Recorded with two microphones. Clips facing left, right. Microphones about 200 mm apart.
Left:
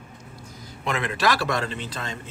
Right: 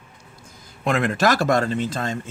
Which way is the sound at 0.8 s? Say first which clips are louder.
Right 5 dB; 50° right (ahead or behind).